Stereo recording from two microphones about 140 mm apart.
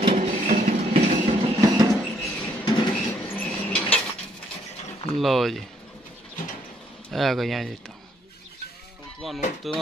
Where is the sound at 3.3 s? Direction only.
10° left (ahead or behind).